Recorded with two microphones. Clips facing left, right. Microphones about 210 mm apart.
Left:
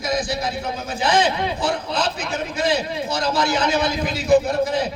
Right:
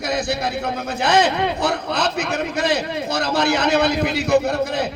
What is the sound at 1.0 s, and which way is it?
A man's voice, 65° right (ahead or behind).